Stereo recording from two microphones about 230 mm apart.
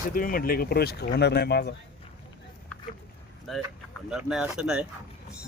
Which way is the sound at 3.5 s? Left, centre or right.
Centre.